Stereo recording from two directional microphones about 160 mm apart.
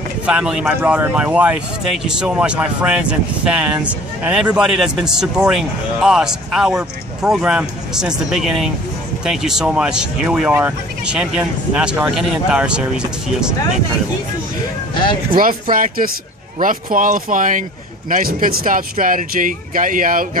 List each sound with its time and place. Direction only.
0.3 s speech: 5° right (ahead or behind)
15.7 s a man's voice: 60° right (ahead or behind)